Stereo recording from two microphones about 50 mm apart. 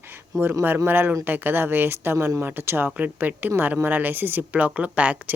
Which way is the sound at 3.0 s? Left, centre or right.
Right.